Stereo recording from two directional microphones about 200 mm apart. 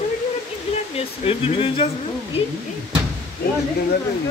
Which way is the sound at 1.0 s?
30° left (ahead or behind).